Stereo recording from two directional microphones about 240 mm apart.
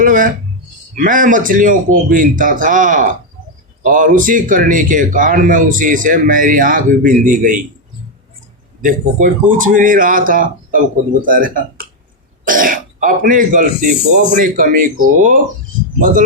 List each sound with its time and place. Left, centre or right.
0.0 s a sound: right
0.9 s a man's voice: right
8.8 s a man's voice: right